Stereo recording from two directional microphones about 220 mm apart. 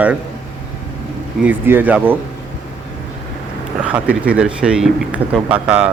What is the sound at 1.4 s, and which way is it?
Speech, 10° right (ahead or behind).